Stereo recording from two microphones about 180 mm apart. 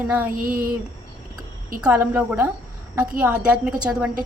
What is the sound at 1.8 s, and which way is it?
A woman's voice, 5° right (ahead or behind).